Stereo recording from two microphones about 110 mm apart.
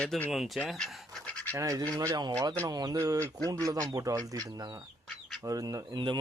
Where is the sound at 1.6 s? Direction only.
35° right (ahead or behind).